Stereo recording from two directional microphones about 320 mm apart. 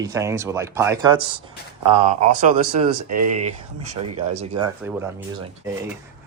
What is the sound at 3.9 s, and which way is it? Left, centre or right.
Speech, right.